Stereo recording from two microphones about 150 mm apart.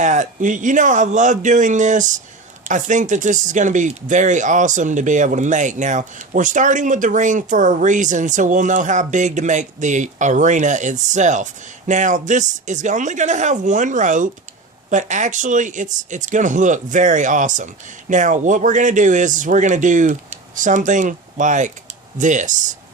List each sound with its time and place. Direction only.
0.0 s speech: 55° right (ahead or behind)